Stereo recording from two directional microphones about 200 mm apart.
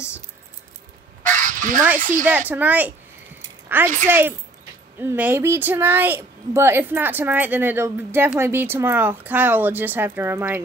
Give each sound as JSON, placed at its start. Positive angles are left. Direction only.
{"t": 1.2, "sound": "fowl", "side_deg": -40}
{"t": 2.0, "sound": "speech", "side_deg": -40}
{"t": 2.2, "sound": "speech", "side_deg": -10}